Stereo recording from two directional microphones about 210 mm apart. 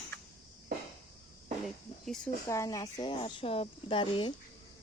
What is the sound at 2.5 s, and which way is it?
Speech, 15° left (ahead or behind).